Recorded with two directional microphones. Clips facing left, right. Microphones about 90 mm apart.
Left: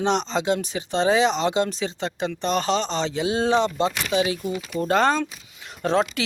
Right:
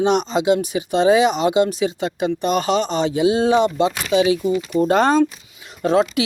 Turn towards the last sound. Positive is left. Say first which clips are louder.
# right 5 dB
turn(degrees=-10)  # may be behind; listen again after turning